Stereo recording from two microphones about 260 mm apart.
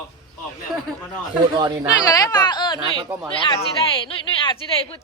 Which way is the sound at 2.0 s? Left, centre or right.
Centre.